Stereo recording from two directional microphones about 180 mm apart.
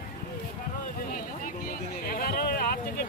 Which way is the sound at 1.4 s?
55° left (ahead or behind).